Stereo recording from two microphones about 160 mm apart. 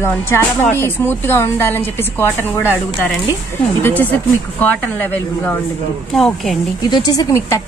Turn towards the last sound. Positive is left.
turn(degrees=15)  # may be behind; listen again after turning